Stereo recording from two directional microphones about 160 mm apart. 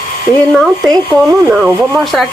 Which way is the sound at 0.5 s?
5° left (ahead or behind).